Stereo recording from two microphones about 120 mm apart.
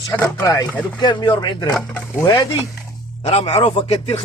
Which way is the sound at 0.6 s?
15° left (ahead or behind).